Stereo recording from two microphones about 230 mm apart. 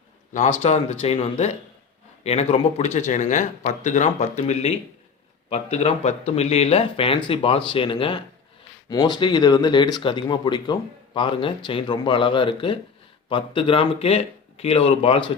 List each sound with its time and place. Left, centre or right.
0.6 s speech: left